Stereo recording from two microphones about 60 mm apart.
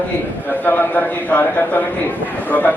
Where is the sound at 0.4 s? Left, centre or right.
Left.